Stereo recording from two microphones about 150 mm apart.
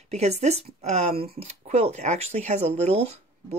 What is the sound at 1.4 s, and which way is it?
Speech, 45° right (ahead or behind).